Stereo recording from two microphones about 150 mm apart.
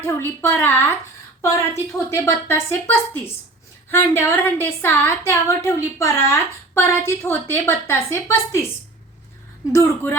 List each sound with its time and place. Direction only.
0.4 s a woman's voice: 15° left (ahead or behind)
9.7 s a woman's voice: 20° left (ahead or behind)